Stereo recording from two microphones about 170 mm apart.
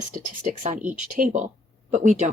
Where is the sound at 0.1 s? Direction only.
50° right (ahead or behind).